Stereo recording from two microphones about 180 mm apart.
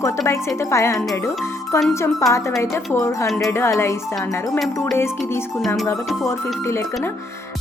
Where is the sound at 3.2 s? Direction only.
Centre (ahead or behind).